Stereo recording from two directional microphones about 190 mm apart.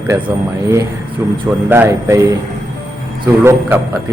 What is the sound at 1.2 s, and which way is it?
Speech, 10° right (ahead or behind).